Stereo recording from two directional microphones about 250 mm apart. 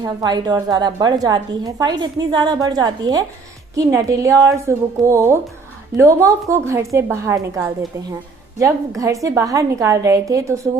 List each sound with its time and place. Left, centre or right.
0.0 s a woman's voice: centre
9.0 s a woman's voice: centre